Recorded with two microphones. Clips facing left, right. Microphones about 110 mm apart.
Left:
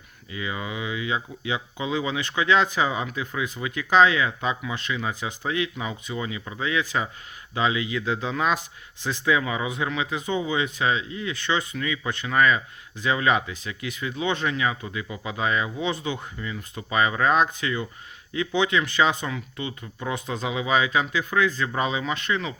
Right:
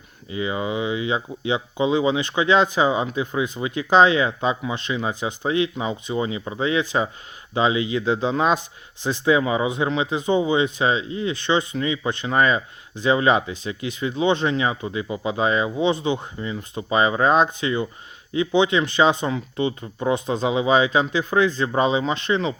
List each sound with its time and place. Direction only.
0.3 s speech: 25° right (ahead or behind)